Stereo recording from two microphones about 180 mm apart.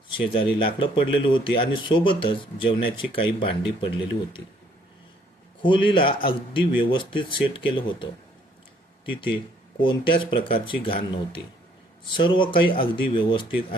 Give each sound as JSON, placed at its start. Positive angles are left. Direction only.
{"t": 0.3, "sound": "speech", "side_deg": 30}
{"t": 5.6, "sound": "speech", "side_deg": 30}
{"t": 9.8, "sound": "speech", "side_deg": 25}